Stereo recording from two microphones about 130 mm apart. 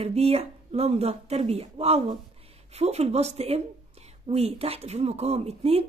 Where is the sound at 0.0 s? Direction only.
55° right (ahead or behind).